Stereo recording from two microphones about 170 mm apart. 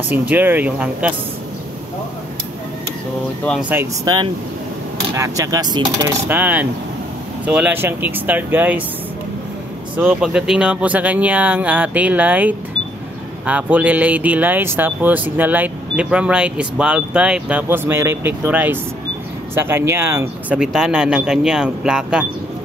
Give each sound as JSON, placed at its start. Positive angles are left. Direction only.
{"t": 0.1, "sound": "speech", "side_deg": -10}
{"t": 3.6, "sound": "speech", "side_deg": -15}
{"t": 6.2, "sound": "speech", "side_deg": -10}
{"t": 9.9, "sound": "speech", "side_deg": -5}